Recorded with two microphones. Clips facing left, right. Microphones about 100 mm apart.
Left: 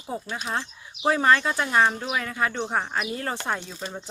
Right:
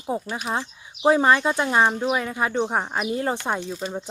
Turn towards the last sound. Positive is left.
turn(degrees=-20)  # may be behind; listen again after turning